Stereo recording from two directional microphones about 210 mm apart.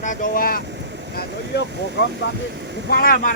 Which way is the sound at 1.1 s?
55° left (ahead or behind).